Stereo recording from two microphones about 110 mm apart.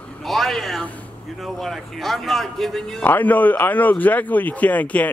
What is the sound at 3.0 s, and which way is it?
Speech, 15° left (ahead or behind).